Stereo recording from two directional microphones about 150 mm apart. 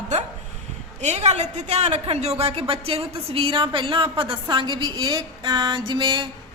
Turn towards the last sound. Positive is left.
turn(degrees=-30)  # may be behind; listen again after turning